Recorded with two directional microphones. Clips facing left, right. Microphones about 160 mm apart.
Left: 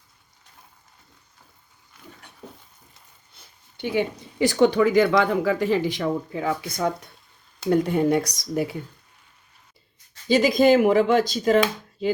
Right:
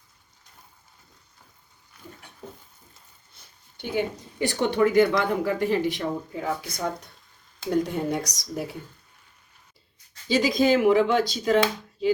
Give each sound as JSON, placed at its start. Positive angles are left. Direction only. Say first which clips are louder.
{"t": 3.8, "sound": "speech", "louder": "left 3 dB", "side_deg": 80}
{"t": 7.7, "sound": "speech", "louder": "left 5 dB", "side_deg": 60}
{"t": 10.2, "sound": "speech", "louder": "left 4 dB", "side_deg": 50}